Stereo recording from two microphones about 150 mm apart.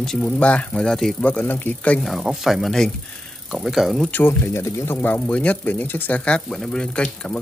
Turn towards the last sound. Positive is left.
turn(degrees=5)  # may be behind; listen again after turning